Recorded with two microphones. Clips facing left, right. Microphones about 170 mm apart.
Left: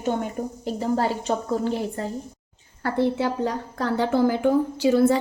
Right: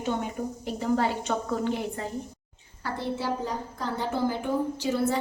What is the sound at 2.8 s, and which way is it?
A woman's voice, 65° left (ahead or behind).